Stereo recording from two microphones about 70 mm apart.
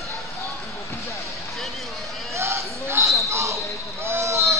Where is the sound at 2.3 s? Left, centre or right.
Right.